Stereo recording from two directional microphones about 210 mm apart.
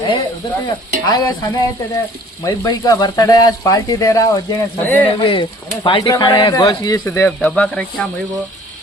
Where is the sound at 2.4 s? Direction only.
15° left (ahead or behind).